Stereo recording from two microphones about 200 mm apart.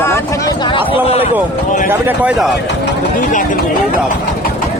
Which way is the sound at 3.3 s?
40° left (ahead or behind).